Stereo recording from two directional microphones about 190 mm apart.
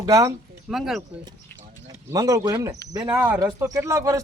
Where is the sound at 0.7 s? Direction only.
Centre (ahead or behind).